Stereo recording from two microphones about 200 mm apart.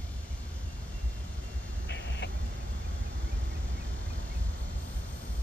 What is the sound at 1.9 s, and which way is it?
Vehicle, 60° left (ahead or behind).